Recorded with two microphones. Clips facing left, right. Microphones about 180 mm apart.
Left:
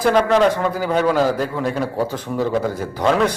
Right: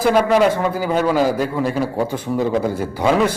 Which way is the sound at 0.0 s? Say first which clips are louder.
Right 1 dB; 5° right (ahead or behind).